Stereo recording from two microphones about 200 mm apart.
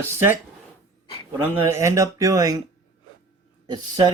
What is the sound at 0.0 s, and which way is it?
Speech, 10° right (ahead or behind).